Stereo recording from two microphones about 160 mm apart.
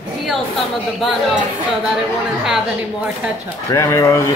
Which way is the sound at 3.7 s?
20° left (ahead or behind).